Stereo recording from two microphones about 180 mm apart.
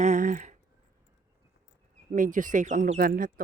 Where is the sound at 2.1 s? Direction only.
45° right (ahead or behind).